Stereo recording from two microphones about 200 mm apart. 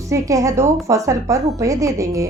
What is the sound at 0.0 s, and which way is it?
A woman's voice, 15° right (ahead or behind).